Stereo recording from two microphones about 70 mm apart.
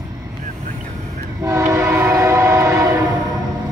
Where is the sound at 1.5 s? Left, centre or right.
Right.